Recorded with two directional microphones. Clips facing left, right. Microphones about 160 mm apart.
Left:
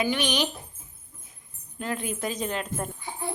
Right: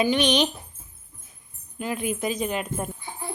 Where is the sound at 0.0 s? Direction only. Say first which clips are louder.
Right 5 dB; 20° right (ahead or behind).